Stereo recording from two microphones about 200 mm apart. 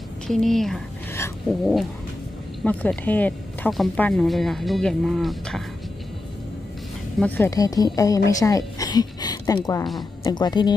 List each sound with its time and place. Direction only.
0.3 s speech: centre (ahead or behind)
2.6 s speech: 5° left (ahead or behind)
7.2 s a woman's voice: 10° left (ahead or behind)